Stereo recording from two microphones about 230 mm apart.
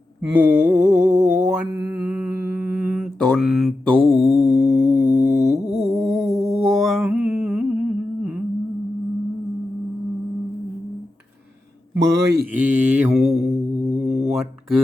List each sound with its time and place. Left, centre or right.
0.3 s mantra: centre
1.1 s a sound: right
1.5 s mantra: centre
4.4 s music: centre
5.1 s mantra: right
5.7 s mantra: centre
11.9 s a man's voice: right
12.5 s mantra: centre